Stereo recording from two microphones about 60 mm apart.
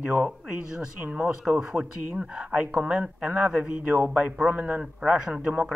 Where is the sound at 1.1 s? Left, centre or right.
Centre.